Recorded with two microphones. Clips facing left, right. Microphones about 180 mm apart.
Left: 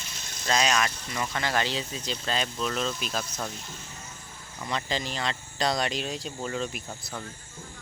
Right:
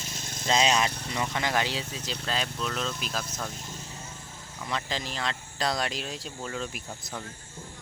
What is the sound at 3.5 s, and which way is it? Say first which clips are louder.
Speech: right 1 dB; 40° right (ahead or behind).